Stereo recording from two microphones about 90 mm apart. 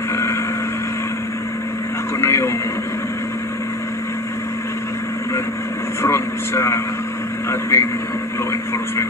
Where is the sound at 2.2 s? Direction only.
30° left (ahead or behind).